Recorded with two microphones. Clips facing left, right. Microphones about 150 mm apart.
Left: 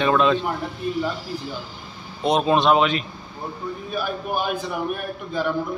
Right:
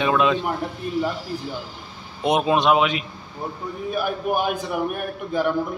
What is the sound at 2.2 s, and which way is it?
Speech, 15° right (ahead or behind).